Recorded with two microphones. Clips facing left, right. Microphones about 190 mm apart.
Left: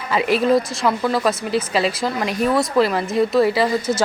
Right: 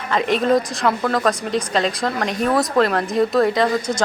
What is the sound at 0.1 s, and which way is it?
Speech, 5° left (ahead or behind).